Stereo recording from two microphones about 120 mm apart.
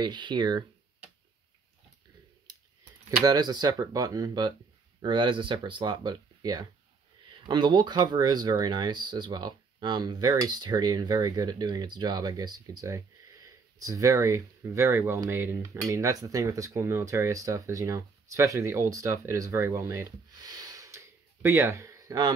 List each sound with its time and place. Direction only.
0.0 s speech: 40° right (ahead or behind)
3.3 s speech: 35° right (ahead or behind)
15.2 s cutlery: 20° right (ahead or behind)
21.4 s speech: 20° right (ahead or behind)